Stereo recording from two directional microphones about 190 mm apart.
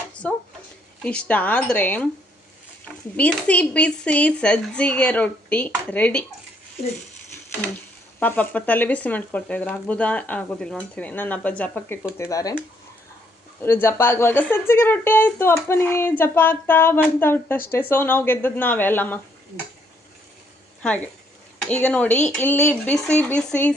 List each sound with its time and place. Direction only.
0.1 s a sound: 5° left (ahead or behind)
1.0 s speech: 5° left (ahead or behind)
8.2 s speech: 10° left (ahead or behind)
13.6 s speech: 10° left (ahead or behind)
20.8 s speech: 10° left (ahead or behind)